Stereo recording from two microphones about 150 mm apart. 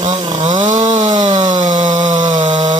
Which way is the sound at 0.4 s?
55° right (ahead or behind).